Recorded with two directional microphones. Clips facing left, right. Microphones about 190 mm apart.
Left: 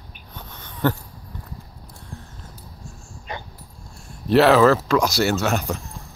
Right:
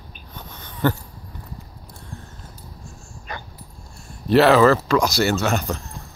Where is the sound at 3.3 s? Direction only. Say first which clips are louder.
Left 1 dB; 20° left (ahead or behind).